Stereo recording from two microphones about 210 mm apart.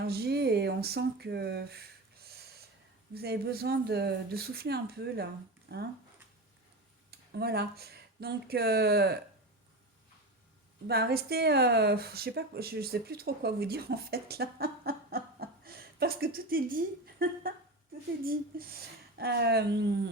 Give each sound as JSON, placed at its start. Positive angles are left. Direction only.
{"t": 0.0, "sound": "speech", "side_deg": -50}
{"t": 3.2, "sound": "speech", "side_deg": -50}
{"t": 7.1, "sound": "speech", "side_deg": -50}
{"t": 10.8, "sound": "speech", "side_deg": -50}